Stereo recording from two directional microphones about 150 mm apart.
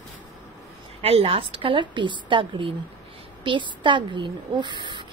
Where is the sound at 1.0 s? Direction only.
40° right (ahead or behind).